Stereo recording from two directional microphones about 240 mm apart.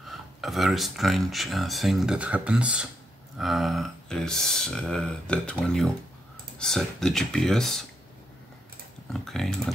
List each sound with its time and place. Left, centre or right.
0.1 s speech: centre
9.1 s speech: centre